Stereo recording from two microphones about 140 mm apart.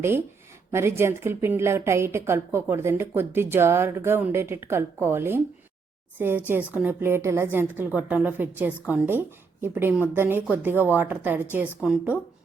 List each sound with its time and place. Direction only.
0.7 s a woman's voice: 15° right (ahead or behind)